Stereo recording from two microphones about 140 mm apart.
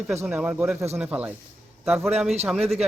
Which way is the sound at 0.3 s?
10° right (ahead or behind).